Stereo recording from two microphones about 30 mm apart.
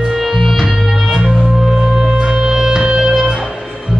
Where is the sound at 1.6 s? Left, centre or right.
Centre.